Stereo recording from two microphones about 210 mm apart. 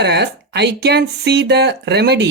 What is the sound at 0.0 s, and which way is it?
Speech, 50° right (ahead or behind).